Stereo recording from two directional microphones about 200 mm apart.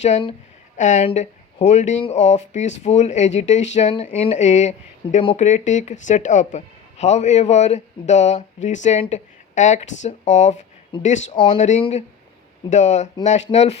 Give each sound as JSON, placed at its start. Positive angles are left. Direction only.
{"t": 0.0, "sound": "speech", "side_deg": 30}